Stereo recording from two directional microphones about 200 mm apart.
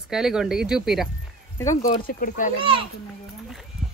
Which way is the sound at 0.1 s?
Centre (ahead or behind).